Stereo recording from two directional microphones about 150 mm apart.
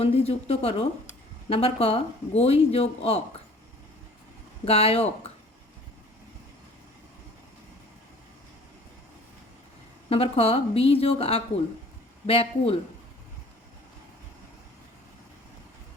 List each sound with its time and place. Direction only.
0.0 s speech: 40° left (ahead or behind)
4.6 s speech: 40° left (ahead or behind)
10.1 s speech: 40° left (ahead or behind)